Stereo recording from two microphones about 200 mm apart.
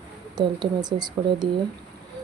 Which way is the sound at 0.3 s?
20° right (ahead or behind).